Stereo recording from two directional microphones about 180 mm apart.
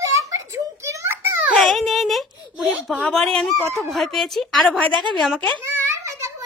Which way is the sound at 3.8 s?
Centre (ahead or behind).